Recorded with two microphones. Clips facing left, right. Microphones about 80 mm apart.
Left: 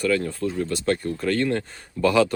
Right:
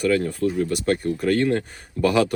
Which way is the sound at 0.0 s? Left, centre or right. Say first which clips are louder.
Right 2 dB; centre.